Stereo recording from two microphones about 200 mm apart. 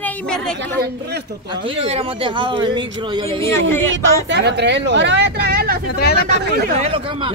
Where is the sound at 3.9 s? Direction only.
60° right (ahead or behind).